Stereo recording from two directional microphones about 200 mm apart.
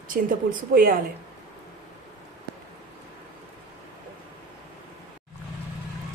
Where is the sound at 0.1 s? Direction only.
45° right (ahead or behind).